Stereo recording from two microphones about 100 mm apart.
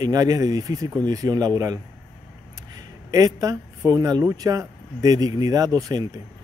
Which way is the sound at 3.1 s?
35° right (ahead or behind).